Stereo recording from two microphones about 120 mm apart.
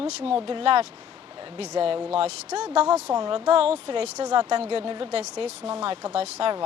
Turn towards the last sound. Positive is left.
turn(degrees=-55)  # may be behind; listen again after turning